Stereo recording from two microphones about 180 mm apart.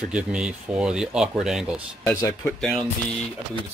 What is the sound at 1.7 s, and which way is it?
Speech, 20° left (ahead or behind).